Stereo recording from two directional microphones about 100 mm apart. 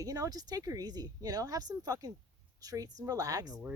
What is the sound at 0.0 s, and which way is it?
Speech, 35° right (ahead or behind).